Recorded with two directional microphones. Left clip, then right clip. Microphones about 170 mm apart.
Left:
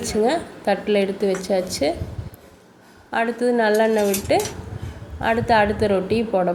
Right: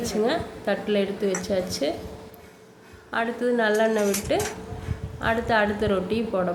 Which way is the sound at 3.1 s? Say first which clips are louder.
Left 4 dB; 20° left (ahead or behind).